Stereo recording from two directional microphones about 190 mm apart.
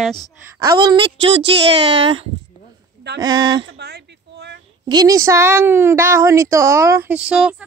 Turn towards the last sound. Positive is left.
turn(degrees=-5)  # may be behind; listen again after turning